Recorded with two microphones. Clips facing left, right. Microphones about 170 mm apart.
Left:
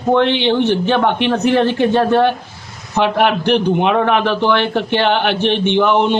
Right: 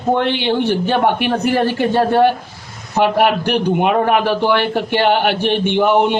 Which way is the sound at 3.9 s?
45° right (ahead or behind).